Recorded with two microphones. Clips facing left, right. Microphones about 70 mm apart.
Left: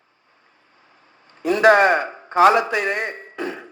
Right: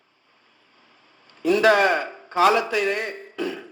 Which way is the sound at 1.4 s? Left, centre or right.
Left.